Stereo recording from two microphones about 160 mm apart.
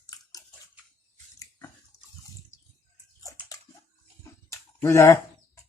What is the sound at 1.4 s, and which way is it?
Biting, 20° left (ahead or behind).